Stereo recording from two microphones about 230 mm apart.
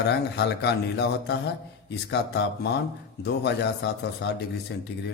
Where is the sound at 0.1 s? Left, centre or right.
Left.